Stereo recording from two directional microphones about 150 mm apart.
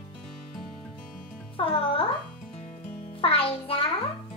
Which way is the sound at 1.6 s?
35° left (ahead or behind).